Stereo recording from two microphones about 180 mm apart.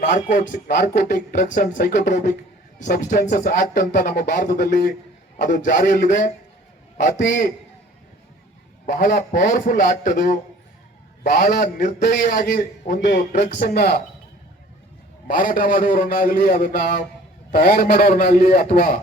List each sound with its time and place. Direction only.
0.1 s speech: 45° left (ahead or behind)
8.9 s speech: 45° left (ahead or behind)
11.9 s speech: 55° left (ahead or behind)
13.6 s speech: 60° left (ahead or behind)
15.3 s speech: 50° left (ahead or behind)